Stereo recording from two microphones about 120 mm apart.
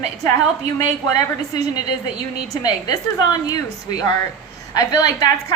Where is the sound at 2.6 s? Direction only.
35° left (ahead or behind).